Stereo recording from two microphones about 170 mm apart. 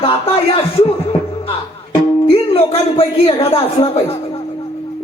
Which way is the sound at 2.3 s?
35° left (ahead or behind).